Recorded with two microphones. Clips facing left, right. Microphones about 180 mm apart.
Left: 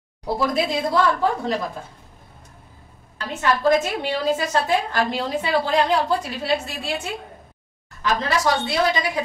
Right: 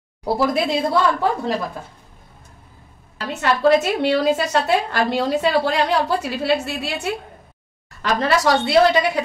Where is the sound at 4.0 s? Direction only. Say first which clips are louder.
Right 5 dB; 75° right (ahead or behind).